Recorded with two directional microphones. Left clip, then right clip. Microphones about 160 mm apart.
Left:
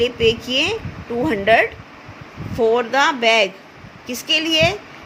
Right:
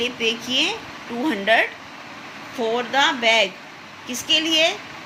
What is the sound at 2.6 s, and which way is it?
A woman's voice, 90° left.